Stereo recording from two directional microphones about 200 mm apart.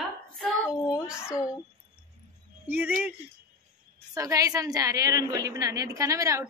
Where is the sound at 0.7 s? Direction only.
20° left (ahead or behind).